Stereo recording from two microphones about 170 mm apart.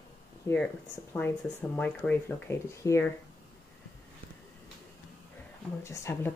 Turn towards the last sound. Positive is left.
turn(degrees=15)  # may be behind; listen again after turning